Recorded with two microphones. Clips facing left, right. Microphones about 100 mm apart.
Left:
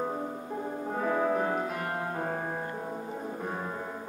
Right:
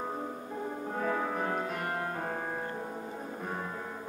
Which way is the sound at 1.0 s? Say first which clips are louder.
Left 5 dB; 10° left (ahead or behind).